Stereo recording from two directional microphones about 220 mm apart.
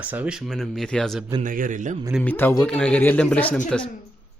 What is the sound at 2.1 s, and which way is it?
A man's voice, 5° left (ahead or behind).